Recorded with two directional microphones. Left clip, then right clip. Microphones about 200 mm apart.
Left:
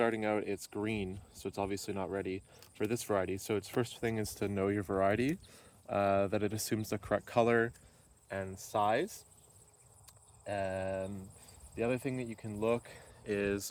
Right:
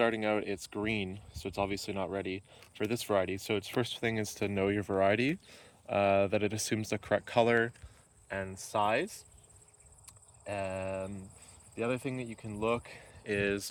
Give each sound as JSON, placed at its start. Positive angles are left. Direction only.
{"t": 0.0, "sound": "speech", "side_deg": -20}
{"t": 8.3, "sound": "speech", "side_deg": -25}
{"t": 13.2, "sound": "speech", "side_deg": -5}